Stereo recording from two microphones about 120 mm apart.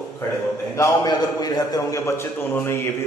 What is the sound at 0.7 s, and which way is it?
A man's voice, 30° left (ahead or behind).